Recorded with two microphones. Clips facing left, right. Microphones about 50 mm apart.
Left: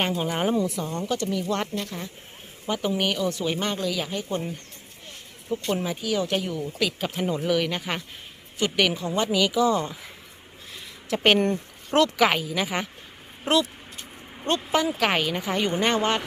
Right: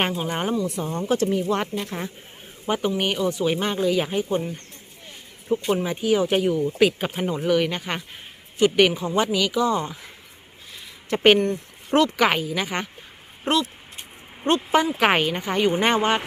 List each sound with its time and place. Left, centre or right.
0.2 s speech: centre
0.8 s speech: right
1.0 s speech: right
1.5 s speech: centre
5.5 s speech: centre
7.1 s speech: centre
11.1 s speech: centre
14.9 s speech: centre
15.4 s speech: centre
15.7 s speech: centre